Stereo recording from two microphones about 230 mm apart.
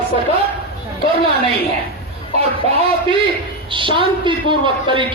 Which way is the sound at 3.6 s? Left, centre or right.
Right.